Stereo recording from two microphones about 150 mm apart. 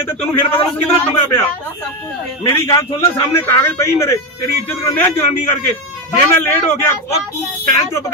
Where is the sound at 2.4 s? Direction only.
20° left (ahead or behind).